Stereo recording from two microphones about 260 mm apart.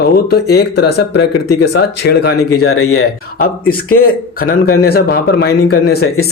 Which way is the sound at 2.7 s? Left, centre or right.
Left.